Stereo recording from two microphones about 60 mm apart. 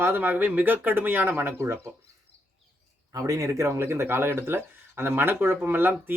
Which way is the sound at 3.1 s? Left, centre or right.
Right.